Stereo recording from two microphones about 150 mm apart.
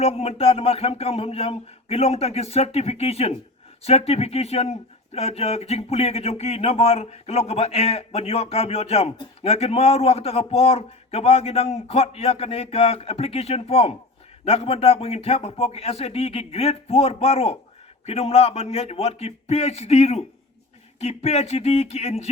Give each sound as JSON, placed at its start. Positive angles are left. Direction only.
{"t": 0.0, "sound": "a man's voice", "side_deg": 40}